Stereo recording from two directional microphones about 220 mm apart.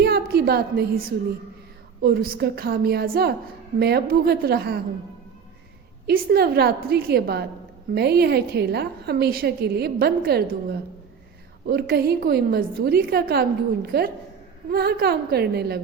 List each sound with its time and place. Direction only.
0.0 s a sound: 45° right (ahead or behind)
2.0 s a woman's voice: 45° right (ahead or behind)
6.1 s a woman's voice: 45° right (ahead or behind)